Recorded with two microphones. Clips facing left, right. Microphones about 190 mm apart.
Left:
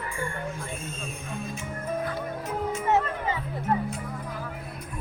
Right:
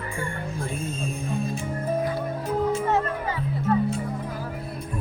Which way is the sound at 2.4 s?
30° right (ahead or behind).